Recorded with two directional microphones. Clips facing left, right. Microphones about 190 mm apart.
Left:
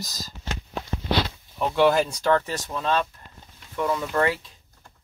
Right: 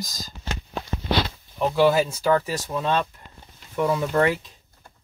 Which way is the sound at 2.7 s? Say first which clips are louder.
Right 1 dB; 20° right (ahead or behind).